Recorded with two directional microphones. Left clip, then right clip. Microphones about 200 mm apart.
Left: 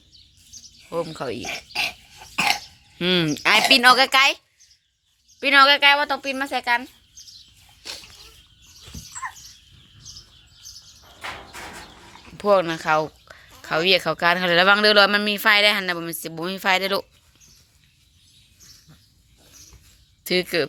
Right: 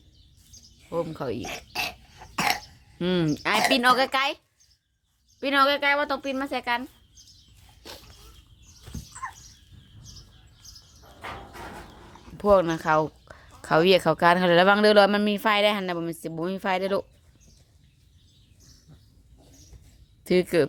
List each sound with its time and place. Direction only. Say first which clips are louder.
0.8 s speech: left 2 dB; 15° left (ahead or behind)
1.5 s cough: left 5 dB; 10° left (ahead or behind)
3.0 s speech: left 5 dB; centre (ahead or behind)
5.4 s speech: left 7 dB; 5° right (ahead or behind)
7.8 s wild animals: left 7 dB; 15° right (ahead or behind)
9.2 s rodents: left 4 dB; 30° left (ahead or behind)
12.4 s speech: left 1 dB; 10° right (ahead or behind)
20.2 s speech: even; 25° right (ahead or behind)